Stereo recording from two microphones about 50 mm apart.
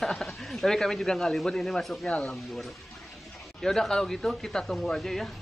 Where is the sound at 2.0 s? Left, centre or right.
Left.